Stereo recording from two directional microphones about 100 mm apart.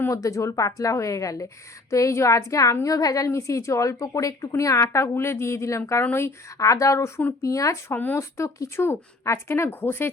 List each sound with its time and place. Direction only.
0.0 s a woman's voice: 30° left (ahead or behind)
7.9 s speech: 20° left (ahead or behind)